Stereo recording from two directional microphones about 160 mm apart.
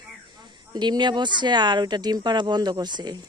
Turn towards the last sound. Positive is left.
turn(degrees=-25)  # may be behind; listen again after turning